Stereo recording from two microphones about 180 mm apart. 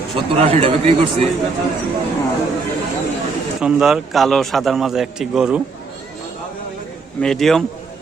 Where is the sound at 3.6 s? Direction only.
5° right (ahead or behind).